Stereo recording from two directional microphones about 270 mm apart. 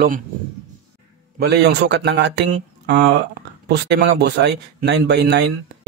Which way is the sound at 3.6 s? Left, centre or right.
Right.